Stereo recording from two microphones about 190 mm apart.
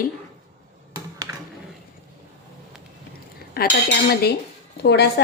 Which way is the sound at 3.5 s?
55° left (ahead or behind).